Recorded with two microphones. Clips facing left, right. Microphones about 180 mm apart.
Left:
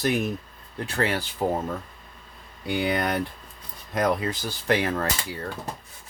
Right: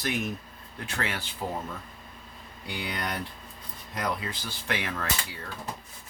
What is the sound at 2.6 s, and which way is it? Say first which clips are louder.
Speech: left 9 dB; 55° left (ahead or behind).